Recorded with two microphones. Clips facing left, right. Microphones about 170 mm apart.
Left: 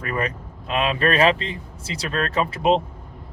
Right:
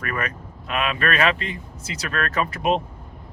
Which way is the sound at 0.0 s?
30° left (ahead or behind).